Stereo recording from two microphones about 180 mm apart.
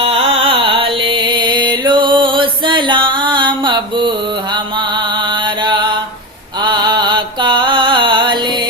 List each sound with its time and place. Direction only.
0.0 s music: 30° right (ahead or behind)
5.6 s mantra: 25° right (ahead or behind)
6.7 s music: 25° right (ahead or behind)